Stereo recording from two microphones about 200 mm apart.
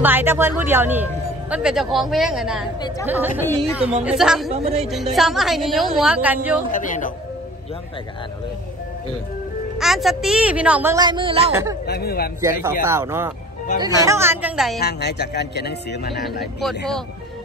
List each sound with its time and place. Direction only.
0.0 s a woman's voice: 10° right (ahead or behind)
4.5 s a woman's voice: 30° right (ahead or behind)
5.1 s a woman's voice: centre (ahead or behind)
6.7 s a man's voice: 40° left (ahead or behind)
9.8 s speech: centre (ahead or behind); by 11.5 s 25° right (ahead or behind)
11.8 s speech: 50° left (ahead or behind)
12.4 s speech: 15° right (ahead or behind)
14.8 s speech: 55° left (ahead or behind)
16.6 s a woman's voice: centre (ahead or behind)